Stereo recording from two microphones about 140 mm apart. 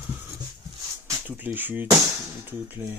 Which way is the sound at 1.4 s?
15° right (ahead or behind).